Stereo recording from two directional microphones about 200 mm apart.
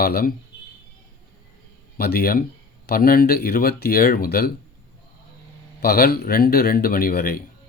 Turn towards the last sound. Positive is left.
turn(degrees=50)  # may be behind; listen again after turning